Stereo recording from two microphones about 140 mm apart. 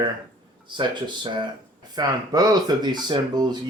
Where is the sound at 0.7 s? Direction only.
35° right (ahead or behind).